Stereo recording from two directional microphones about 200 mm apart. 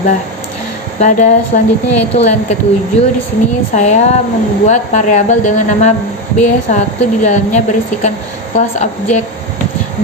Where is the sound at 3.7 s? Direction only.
35° left (ahead or behind).